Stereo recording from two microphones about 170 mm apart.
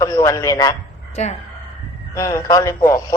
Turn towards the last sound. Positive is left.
turn(degrees=20)  # may be behind; listen again after turning